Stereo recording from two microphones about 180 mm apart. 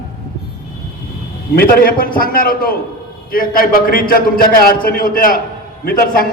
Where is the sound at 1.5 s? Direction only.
55° left (ahead or behind).